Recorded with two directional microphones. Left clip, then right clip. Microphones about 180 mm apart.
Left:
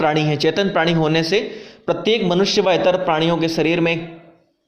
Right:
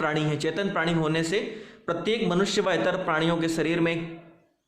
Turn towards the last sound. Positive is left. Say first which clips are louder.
# left 8 dB
turn(degrees=15)  # may be behind; listen again after turning